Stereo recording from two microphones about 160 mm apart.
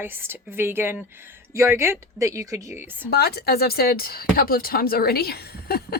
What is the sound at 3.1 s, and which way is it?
A woman's voice, 80° left.